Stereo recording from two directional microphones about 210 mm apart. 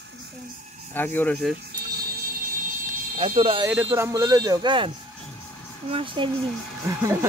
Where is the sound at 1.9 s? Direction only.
45° right (ahead or behind).